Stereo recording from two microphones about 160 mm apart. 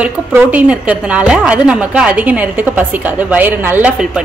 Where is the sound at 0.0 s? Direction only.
10° right (ahead or behind).